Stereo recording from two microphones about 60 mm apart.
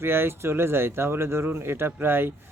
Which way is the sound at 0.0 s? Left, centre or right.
Right.